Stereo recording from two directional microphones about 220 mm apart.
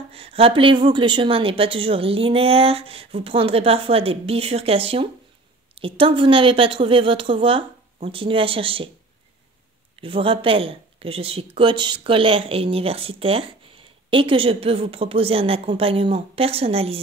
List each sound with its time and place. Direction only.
0.1 s speech: 25° right (ahead or behind)
9.9 s speech: 25° right (ahead or behind)